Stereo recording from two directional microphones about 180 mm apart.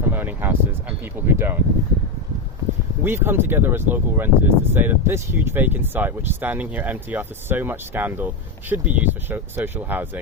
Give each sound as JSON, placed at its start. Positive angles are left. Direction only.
{"t": 0.1, "sound": "speech", "side_deg": -10}
{"t": 3.0, "sound": "speech", "side_deg": -10}